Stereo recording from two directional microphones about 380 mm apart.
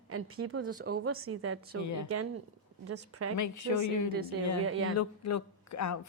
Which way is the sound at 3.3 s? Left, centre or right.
Left.